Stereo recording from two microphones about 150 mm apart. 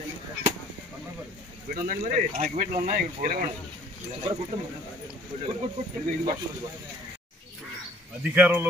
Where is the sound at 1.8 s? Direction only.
60° right (ahead or behind).